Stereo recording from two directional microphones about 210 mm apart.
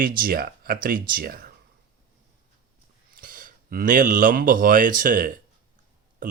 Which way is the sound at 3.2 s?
40° right (ahead or behind).